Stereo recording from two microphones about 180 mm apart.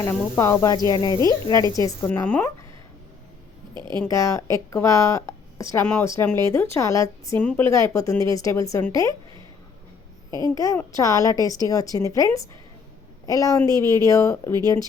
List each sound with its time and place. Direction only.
0.0 s a woman's voice: 15° left (ahead or behind)
3.8 s speech: 25° right (ahead or behind)
4.0 s a woman's voice: 15° left (ahead or behind)
10.5 s a woman's voice: 20° left (ahead or behind)
13.7 s speech: 20° right (ahead or behind)
13.9 s a woman's voice: 15° left (ahead or behind)